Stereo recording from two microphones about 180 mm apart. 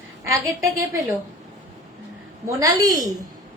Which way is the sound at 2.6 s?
20° right (ahead or behind).